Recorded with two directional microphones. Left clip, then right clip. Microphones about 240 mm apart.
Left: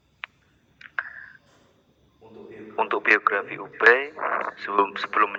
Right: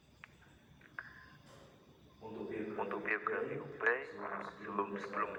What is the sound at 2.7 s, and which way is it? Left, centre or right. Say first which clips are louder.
Speech: left 19 dB; left.